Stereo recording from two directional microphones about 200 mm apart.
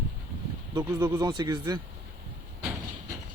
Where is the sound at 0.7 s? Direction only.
15° right (ahead or behind).